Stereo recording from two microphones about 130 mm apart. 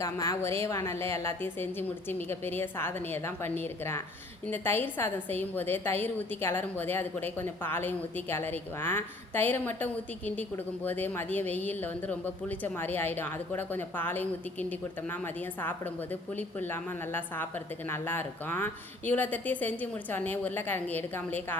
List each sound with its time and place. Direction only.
0.0 s a woman's voice: 25° left (ahead or behind)